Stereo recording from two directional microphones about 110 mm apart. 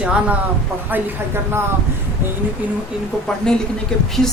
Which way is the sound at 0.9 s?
20° right (ahead or behind).